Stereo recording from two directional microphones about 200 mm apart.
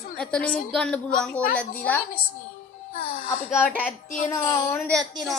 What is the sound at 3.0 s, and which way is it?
Speech, 45° left (ahead or behind).